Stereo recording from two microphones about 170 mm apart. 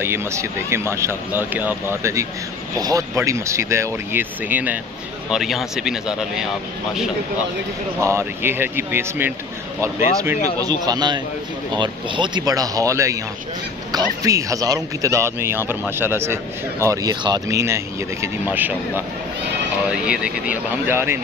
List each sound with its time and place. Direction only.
0.0 s speech: 15° right (ahead or behind)
8.0 s speech: 15° right (ahead or behind)
10.6 s speech: 25° right (ahead or behind)